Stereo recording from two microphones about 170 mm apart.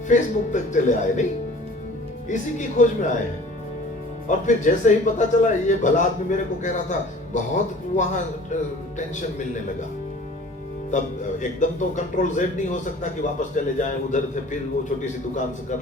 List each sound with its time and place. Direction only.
0.1 s a man's voice: 45° left (ahead or behind)
2.3 s a man's voice: 45° left (ahead or behind)
4.3 s a man's voice: 45° left (ahead or behind)
10.9 s a man's voice: 45° left (ahead or behind)